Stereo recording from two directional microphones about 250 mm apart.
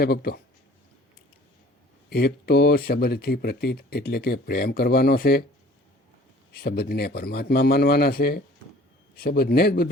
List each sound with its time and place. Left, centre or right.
0.0 s speech: left
2.0 s speech: left
6.5 s speech: left